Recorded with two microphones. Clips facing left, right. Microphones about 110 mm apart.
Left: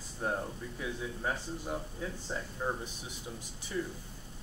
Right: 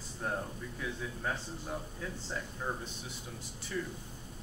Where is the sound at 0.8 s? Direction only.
20° left (ahead or behind).